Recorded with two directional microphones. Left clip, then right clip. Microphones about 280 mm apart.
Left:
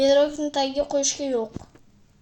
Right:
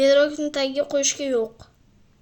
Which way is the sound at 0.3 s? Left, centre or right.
Centre.